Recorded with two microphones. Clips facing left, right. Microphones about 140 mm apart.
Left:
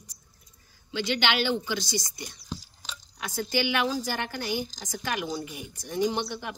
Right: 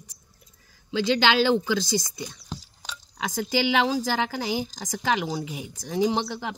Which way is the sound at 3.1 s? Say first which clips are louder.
Right 3 dB; 90° right.